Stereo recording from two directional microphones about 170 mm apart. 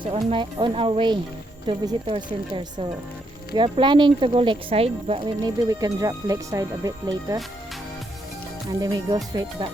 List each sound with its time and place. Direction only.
0.0 s speech: 30° right (ahead or behind)
8.8 s speech: 20° right (ahead or behind)